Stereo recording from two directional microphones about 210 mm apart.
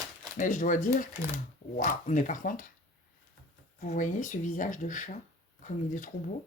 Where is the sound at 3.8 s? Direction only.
35° left (ahead or behind).